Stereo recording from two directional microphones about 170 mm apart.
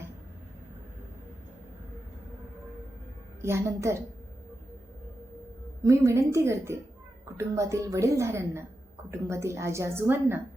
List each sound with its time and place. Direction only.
3.4 s a woman's voice: 15° right (ahead or behind)
5.8 s a woman's voice: 20° right (ahead or behind)